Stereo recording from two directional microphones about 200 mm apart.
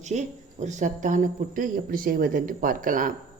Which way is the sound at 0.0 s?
35° right (ahead or behind).